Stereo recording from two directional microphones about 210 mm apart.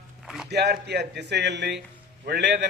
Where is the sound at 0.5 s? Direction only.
50° right (ahead or behind).